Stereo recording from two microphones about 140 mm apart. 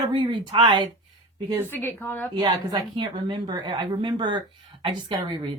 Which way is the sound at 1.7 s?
15° left (ahead or behind).